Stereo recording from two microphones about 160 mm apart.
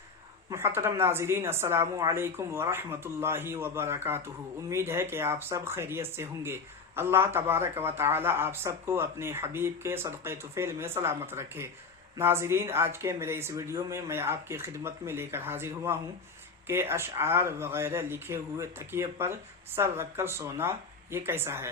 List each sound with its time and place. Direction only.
0.5 s speech: 15° right (ahead or behind)